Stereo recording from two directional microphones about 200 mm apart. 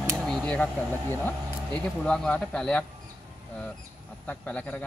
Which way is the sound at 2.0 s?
5° left (ahead or behind).